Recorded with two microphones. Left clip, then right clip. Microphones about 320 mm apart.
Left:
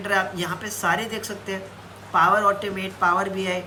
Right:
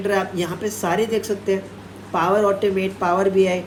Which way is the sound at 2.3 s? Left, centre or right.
Centre.